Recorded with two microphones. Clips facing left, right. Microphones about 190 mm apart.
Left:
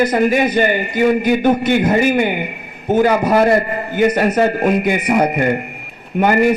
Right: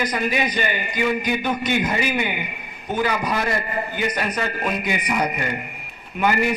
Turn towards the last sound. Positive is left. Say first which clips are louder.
# left 8 dB
turn(degrees=45)  # may be behind; listen again after turning